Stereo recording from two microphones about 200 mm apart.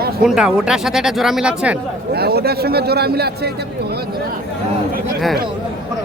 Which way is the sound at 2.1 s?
50° right (ahead or behind).